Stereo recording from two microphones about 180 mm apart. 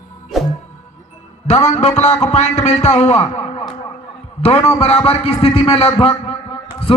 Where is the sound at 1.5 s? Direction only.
40° left (ahead or behind).